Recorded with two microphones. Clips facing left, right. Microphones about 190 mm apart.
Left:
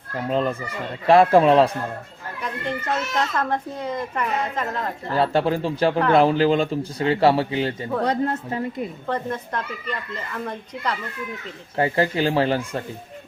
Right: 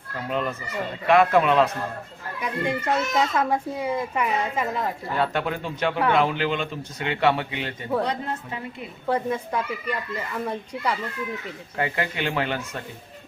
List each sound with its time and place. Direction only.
0.3 s a man's voice: 30° left (ahead or behind)
2.4 s a child's voice: 10° right (ahead or behind)
5.1 s a man's voice: 30° left (ahead or behind)
8.0 s a woman's voice: 45° left (ahead or behind)
9.0 s a child's voice: 10° right (ahead or behind)
11.8 s a man's voice: 35° left (ahead or behind)